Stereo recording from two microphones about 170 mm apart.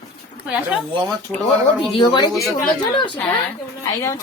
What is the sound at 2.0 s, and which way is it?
Speech, 25° left (ahead or behind).